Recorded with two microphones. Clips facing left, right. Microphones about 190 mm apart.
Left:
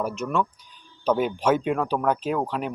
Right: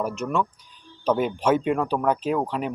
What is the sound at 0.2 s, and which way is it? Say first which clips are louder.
Speech: even; 5° left (ahead or behind).